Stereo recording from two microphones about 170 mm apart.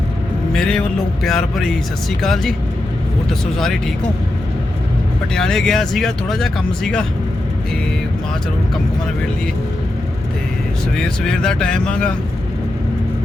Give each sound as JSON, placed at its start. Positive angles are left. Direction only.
{"t": 0.5, "sound": "speech", "side_deg": 5}
{"t": 5.3, "sound": "speech", "side_deg": 5}
{"t": 10.9, "sound": "speech", "side_deg": 5}